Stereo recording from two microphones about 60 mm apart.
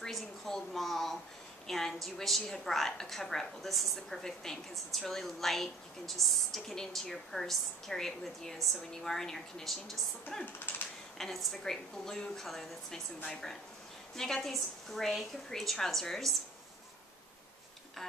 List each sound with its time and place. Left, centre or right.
0.0 s a sound: centre
1.7 s a woman's voice: centre
14.1 s a woman's voice: centre